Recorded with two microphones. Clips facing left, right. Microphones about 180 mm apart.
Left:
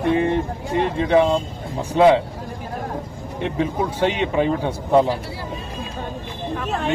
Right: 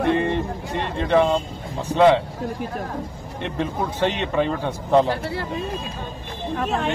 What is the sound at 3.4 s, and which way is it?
A man's voice, 5° left (ahead or behind).